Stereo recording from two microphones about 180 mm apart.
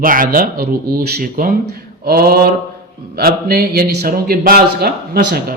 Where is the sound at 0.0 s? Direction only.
50° right (ahead or behind).